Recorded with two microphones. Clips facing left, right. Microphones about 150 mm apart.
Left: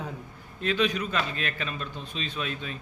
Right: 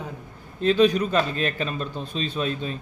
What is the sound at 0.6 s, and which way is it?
A man's voice, 35° right (ahead or behind).